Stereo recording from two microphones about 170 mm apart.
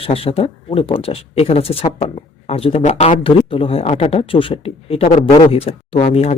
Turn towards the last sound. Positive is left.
turn(degrees=40)  # may be behind; listen again after turning